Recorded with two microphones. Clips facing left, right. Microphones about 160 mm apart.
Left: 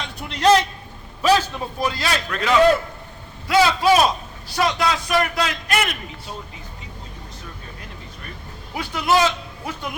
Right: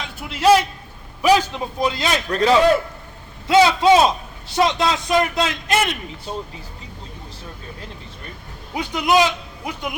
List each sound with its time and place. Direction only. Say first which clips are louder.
0.0 s a sound: right 1 dB; 5° right (ahead or behind)
1.2 s a man's voice: right 2 dB; 15° right (ahead or behind)
2.3 s a man's voice: right 6 dB; 35° right (ahead or behind)
3.4 s a man's voice: right 3 dB; 25° right (ahead or behind)
8.7 s a man's voice: right 2 dB; 20° right (ahead or behind)